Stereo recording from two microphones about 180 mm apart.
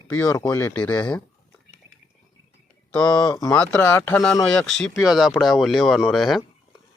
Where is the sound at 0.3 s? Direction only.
15° left (ahead or behind).